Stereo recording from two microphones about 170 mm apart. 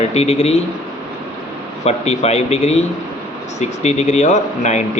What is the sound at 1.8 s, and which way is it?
A man's voice, 40° left (ahead or behind).